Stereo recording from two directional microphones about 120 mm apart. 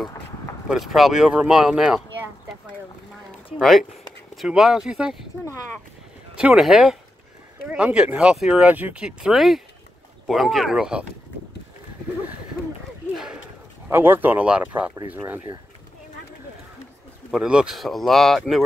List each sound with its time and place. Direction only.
0.7 s speech: centre (ahead or behind)
3.5 s speech: centre (ahead or behind)
6.3 s speech: 5° right (ahead or behind)
13.1 s a sound: 5° right (ahead or behind)
13.8 s speech: 20° right (ahead or behind)
17.3 s speech: 5° right (ahead or behind)